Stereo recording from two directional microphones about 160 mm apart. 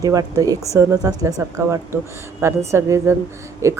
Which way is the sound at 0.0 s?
20° right (ahead or behind).